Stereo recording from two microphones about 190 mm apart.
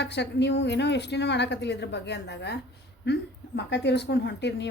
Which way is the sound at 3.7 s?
65° left (ahead or behind).